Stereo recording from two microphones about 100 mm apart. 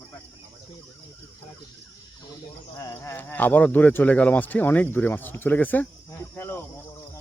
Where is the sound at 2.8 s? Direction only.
30° left (ahead or behind).